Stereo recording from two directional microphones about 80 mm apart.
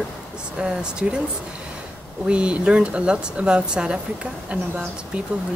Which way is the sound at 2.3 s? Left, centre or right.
Centre.